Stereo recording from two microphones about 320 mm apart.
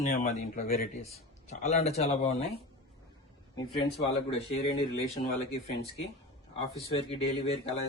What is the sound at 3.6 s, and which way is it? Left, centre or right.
Speech, centre.